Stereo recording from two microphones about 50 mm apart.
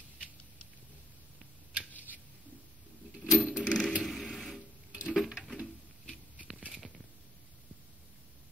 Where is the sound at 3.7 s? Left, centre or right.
Centre.